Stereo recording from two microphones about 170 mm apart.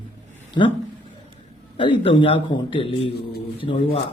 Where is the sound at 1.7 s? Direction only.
30° left (ahead or behind).